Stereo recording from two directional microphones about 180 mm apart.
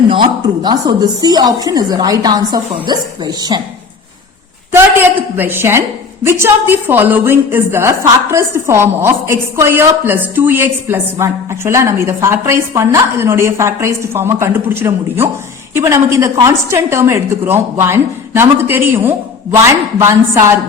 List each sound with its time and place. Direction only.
0.1 s a woman's voice: 25° right (ahead or behind)
4.7 s a woman's voice: 10° right (ahead or behind)